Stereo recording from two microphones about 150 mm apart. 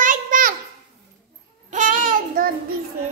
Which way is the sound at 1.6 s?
60° right (ahead or behind).